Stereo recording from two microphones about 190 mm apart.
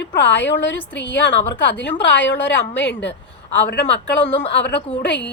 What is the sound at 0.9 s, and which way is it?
A woman's voice, 75° left (ahead or behind).